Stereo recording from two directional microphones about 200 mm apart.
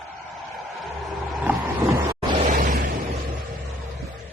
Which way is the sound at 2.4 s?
40° right (ahead or behind).